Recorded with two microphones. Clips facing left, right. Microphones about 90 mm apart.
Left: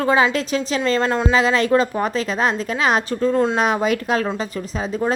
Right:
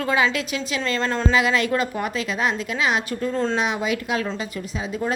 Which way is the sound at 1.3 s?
35° left (ahead or behind).